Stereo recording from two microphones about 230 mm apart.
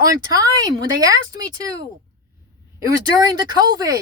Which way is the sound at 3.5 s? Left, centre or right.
Centre.